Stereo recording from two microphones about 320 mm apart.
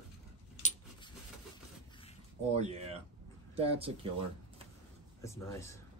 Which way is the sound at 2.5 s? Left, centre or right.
Centre.